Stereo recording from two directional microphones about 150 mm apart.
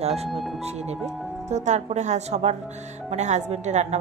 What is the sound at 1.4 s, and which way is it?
Speech, 50° right (ahead or behind).